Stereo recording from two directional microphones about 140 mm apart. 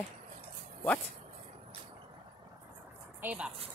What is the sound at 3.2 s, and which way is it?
Speech, 10° right (ahead or behind).